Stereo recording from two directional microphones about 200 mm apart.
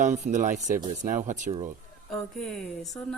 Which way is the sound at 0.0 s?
40° right (ahead or behind).